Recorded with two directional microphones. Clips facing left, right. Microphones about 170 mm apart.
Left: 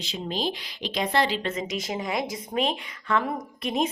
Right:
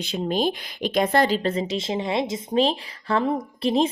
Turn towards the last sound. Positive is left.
turn(degrees=-30)  # may be behind; listen again after turning